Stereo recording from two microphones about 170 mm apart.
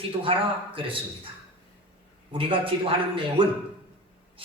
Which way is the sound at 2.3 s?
30° right (ahead or behind).